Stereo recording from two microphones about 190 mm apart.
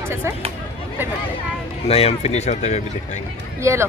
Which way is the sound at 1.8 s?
30° left (ahead or behind).